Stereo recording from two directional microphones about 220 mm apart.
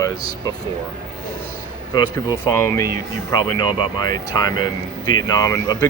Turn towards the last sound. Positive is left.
turn(degrees=15)  # may be behind; listen again after turning